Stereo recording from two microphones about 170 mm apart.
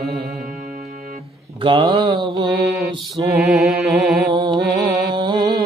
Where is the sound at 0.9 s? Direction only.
50° right (ahead or behind).